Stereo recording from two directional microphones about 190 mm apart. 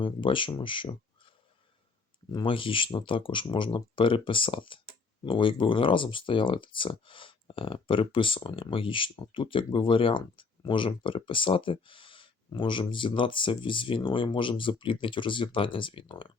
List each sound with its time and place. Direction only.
0.0 s speech: 25° left (ahead or behind)
2.3 s speech: 25° left (ahead or behind)